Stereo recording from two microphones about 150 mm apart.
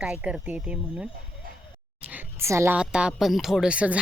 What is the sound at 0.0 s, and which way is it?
Speech, 5° right (ahead or behind).